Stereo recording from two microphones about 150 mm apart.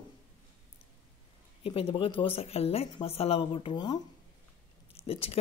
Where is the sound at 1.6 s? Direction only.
40° left (ahead or behind).